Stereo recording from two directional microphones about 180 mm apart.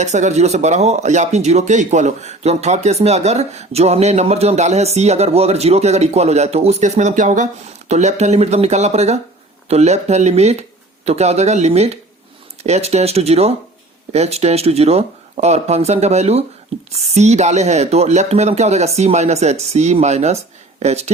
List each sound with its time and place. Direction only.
0.0 s speech: 40° right (ahead or behind)